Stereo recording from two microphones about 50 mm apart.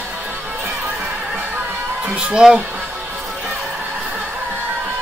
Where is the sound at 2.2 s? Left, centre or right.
Centre.